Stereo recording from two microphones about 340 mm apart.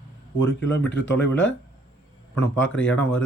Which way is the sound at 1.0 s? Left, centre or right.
Left.